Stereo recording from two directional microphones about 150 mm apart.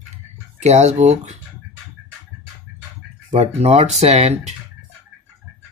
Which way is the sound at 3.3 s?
45° right (ahead or behind).